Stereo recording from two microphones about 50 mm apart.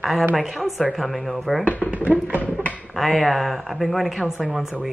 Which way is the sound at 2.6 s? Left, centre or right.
Left.